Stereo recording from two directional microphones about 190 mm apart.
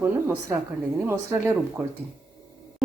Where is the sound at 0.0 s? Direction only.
15° right (ahead or behind).